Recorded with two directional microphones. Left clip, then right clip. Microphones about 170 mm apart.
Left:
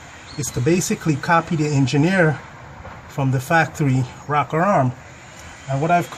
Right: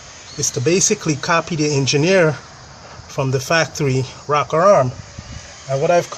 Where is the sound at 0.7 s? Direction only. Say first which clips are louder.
Right 3 dB; 40° right (ahead or behind).